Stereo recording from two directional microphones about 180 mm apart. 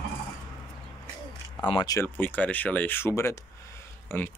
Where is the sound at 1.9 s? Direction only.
10° left (ahead or behind).